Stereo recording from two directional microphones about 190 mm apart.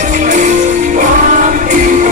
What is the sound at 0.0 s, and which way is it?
Music, 40° right (ahead or behind).